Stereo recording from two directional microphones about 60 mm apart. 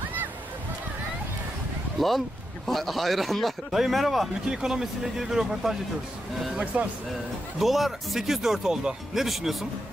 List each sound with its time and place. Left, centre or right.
2.0 s a man's voice: centre
6.6 s speech: right
7.5 s a man's voice: centre